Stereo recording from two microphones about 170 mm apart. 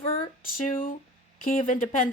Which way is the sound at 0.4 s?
55° left (ahead or behind).